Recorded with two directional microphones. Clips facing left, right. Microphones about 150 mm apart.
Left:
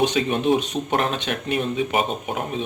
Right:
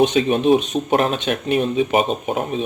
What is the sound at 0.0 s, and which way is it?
Speech, 20° right (ahead or behind).